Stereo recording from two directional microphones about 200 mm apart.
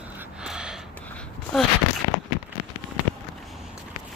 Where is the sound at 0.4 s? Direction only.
5° right (ahead or behind).